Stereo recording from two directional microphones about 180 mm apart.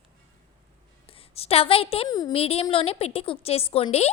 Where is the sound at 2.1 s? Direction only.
20° left (ahead or behind).